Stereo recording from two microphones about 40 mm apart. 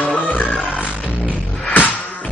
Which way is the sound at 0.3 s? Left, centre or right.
Left.